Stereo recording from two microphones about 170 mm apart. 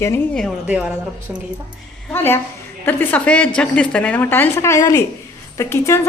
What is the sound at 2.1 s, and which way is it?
A woman's voice, 15° left (ahead or behind).